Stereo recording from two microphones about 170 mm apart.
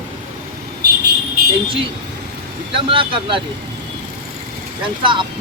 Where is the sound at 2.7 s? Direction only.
30° right (ahead or behind).